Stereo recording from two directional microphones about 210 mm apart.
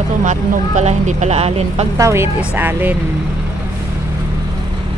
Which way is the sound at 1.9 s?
15° right (ahead or behind).